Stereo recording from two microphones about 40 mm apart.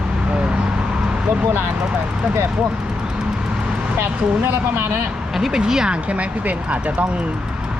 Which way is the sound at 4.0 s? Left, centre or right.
Right.